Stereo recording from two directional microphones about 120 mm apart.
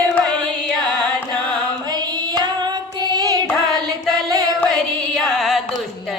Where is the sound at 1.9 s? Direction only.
35° right (ahead or behind).